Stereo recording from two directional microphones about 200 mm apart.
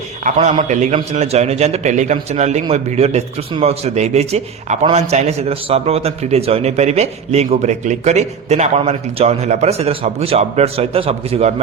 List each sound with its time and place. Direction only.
0.3 s a man's voice: 35° right (ahead or behind)